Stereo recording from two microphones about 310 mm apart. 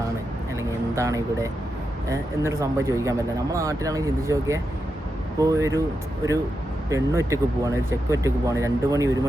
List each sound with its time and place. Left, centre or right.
0.9 s speech: centre
6.9 s speech: centre